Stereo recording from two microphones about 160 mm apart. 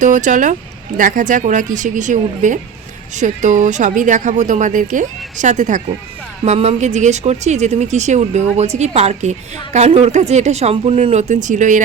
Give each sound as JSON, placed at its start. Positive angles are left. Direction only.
{"t": 0.0, "sound": "a woman's voice", "side_deg": -50}